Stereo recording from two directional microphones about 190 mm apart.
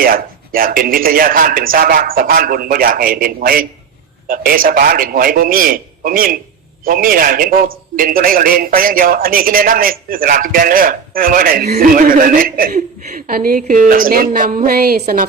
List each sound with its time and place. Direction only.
0.0 s a man's voice: 50° right (ahead or behind)